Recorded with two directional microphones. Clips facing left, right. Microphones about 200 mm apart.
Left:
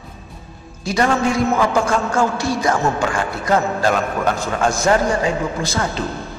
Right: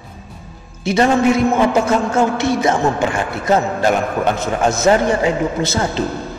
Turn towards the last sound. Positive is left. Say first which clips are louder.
# right 3 dB
turn(degrees=-25)  # may be behind; listen again after turning